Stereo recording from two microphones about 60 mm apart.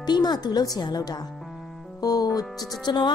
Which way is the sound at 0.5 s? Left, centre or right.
Left.